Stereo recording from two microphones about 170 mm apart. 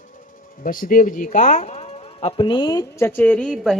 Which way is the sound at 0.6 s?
55° left (ahead or behind).